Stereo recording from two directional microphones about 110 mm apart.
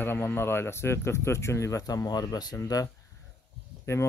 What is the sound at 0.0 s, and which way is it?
Speech, 20° left (ahead or behind).